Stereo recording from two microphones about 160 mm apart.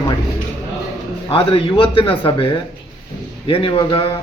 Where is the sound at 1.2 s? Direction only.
35° left (ahead or behind).